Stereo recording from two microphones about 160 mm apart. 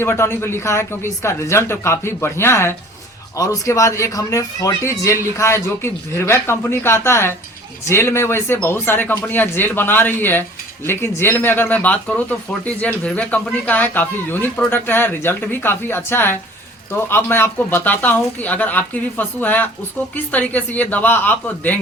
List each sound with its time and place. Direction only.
0.0 s speech: 15° left (ahead or behind)